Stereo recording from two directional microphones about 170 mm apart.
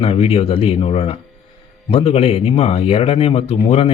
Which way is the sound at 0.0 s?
35° left (ahead or behind).